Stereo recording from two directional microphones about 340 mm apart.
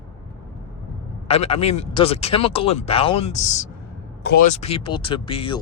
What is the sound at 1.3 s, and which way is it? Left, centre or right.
Speech, centre.